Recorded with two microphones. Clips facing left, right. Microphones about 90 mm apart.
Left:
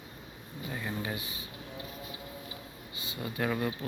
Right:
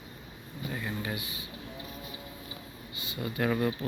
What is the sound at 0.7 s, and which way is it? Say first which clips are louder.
Speech: right 1 dB; 10° left (ahead or behind).